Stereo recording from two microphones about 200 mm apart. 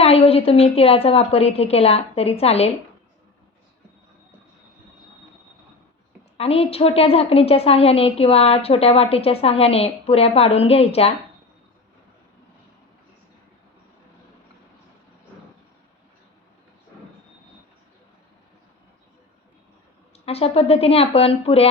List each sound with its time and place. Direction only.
0.0 s a woman's voice: 30° left (ahead or behind)
6.3 s a woman's voice: 30° left (ahead or behind)
20.2 s a woman's voice: 30° left (ahead or behind)